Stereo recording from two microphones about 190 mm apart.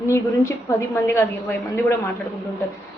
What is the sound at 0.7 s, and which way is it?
Speech, 15° left (ahead or behind).